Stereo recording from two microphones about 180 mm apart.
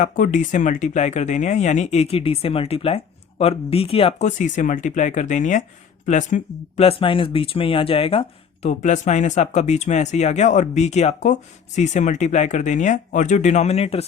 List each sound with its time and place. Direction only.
0.0 s speech: 45° left (ahead or behind)
8.6 s speech: 40° left (ahead or behind)